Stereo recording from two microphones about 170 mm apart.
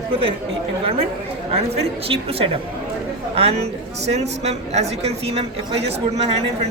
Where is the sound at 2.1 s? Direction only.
35° right (ahead or behind).